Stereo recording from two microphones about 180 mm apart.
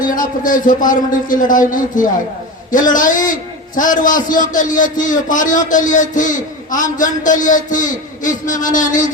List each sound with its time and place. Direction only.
0.0 s a man's voice: 50° left (ahead or behind)